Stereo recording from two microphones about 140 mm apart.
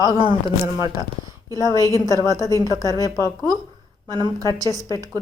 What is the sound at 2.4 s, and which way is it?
Speech, 25° left (ahead or behind).